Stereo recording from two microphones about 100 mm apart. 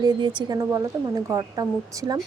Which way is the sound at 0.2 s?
50° right (ahead or behind).